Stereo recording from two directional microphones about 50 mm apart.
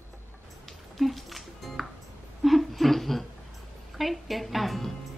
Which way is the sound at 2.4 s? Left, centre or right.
Centre.